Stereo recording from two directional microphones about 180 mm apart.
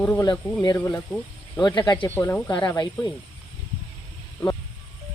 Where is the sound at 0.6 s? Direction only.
20° left (ahead or behind).